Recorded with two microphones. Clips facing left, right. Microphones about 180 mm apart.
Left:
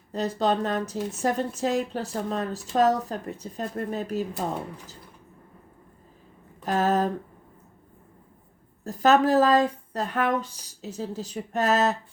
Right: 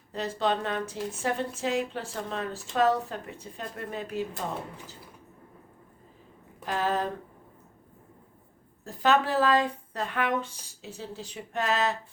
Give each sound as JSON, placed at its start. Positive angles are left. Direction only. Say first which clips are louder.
{"t": 0.1, "sound": "speech", "louder": "left 4 dB", "side_deg": 40}
{"t": 6.7, "sound": "speech", "louder": "left 5 dB", "side_deg": 45}
{"t": 8.8, "sound": "speech", "louder": "left 5 dB", "side_deg": 40}